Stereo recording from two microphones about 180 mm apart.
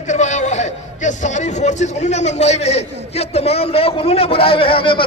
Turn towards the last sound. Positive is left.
turn(degrees=30)  # may be behind; listen again after turning